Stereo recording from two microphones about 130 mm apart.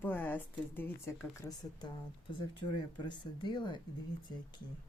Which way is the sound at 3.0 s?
35° left (ahead or behind).